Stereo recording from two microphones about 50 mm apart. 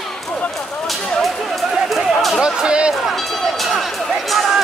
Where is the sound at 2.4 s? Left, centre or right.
Centre.